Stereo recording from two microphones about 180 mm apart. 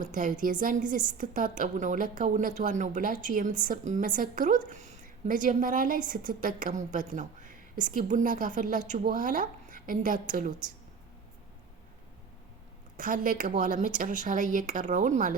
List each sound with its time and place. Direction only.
0.0 s a woman's voice: 45° right (ahead or behind)
13.0 s a woman's voice: 50° right (ahead or behind)